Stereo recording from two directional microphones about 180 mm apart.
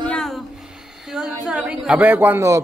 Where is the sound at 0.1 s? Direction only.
5° left (ahead or behind).